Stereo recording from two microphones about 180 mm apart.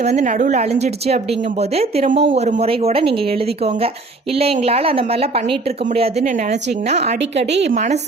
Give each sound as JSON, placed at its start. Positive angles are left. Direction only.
{"t": 0.0, "sound": "a woman's voice", "side_deg": -40}